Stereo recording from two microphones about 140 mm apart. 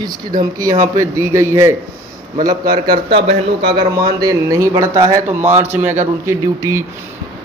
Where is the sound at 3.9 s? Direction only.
25° right (ahead or behind).